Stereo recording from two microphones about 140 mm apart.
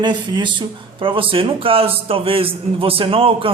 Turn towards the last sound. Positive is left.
turn(degrees=-40)  # may be behind; listen again after turning